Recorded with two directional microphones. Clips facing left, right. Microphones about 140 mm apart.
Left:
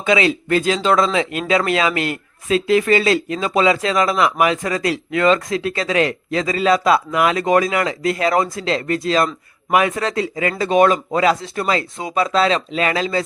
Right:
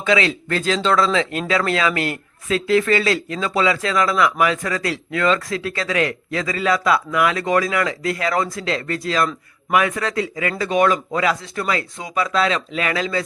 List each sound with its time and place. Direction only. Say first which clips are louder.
0.0 s speech: left 2 dB; 20° left (ahead or behind)